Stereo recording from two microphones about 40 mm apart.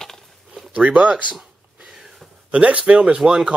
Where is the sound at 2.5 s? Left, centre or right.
Right.